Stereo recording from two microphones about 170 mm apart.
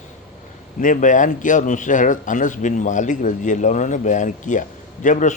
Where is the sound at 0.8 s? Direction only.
50° left (ahead or behind).